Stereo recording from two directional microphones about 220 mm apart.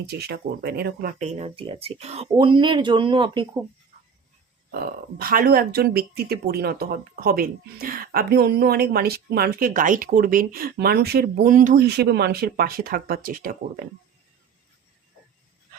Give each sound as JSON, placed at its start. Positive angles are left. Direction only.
{"t": 0.1, "sound": "speech", "side_deg": -45}
{"t": 1.2, "sound": "speech", "side_deg": -25}
{"t": 4.7, "sound": "speech", "side_deg": -45}